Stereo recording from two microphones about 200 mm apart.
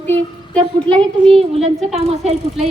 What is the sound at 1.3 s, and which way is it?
Speech, 30° right (ahead or behind).